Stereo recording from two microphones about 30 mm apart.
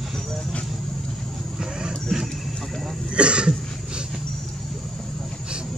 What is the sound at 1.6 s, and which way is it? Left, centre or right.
Vehicle, right.